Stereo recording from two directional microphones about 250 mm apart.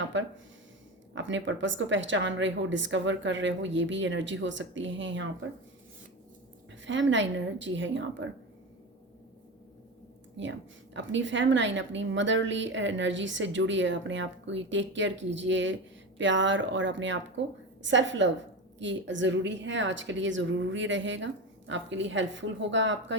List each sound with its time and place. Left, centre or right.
0.1 s a woman's voice: right
6.8 s a woman's voice: right
10.4 s a woman's voice: right